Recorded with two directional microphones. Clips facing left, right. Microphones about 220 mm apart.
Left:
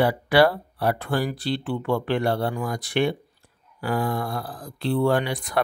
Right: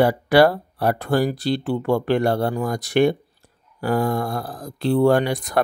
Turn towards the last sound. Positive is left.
turn(degrees=-40)  # may be behind; listen again after turning